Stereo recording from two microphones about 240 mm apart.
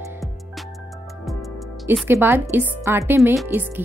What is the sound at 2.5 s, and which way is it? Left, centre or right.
A woman's voice, centre.